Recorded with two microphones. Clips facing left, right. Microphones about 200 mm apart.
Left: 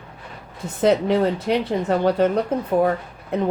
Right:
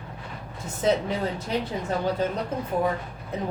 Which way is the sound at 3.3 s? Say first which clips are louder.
Left 8 dB; 65° left (ahead or behind).